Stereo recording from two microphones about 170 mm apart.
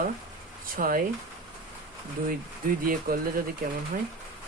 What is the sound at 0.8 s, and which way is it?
Speech, 55° right (ahead or behind).